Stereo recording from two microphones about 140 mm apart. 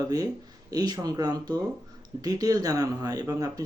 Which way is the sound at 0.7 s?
25° right (ahead or behind).